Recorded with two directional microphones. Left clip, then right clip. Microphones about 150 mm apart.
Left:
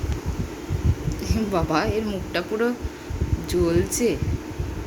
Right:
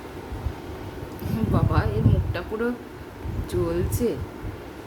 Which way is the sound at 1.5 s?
25° left (ahead or behind).